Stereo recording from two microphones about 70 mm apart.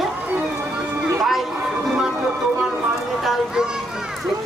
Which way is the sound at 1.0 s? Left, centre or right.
Centre.